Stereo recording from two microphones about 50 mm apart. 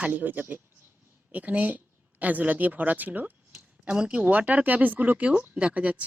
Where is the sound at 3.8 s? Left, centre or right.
Right.